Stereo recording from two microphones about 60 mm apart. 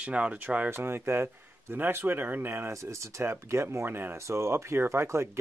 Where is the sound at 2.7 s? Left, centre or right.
Right.